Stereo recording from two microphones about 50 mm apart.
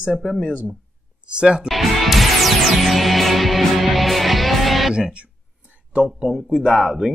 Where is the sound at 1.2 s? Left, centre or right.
Centre.